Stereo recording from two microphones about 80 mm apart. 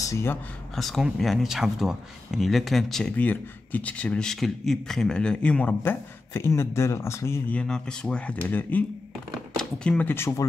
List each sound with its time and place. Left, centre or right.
0.0 s speech: left
0.7 s speech: centre
5.8 s speech: left
7.5 s speech: centre
8.4 s speech: left
10.0 s speech: left